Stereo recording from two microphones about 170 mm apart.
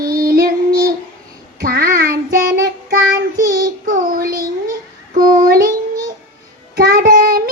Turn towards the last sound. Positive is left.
turn(degrees=-55)  # may be behind; listen again after turning